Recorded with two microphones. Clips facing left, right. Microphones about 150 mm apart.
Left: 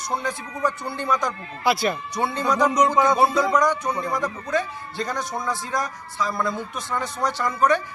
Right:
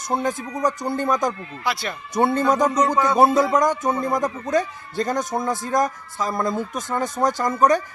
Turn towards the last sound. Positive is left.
turn(degrees=-40)  # may be behind; listen again after turning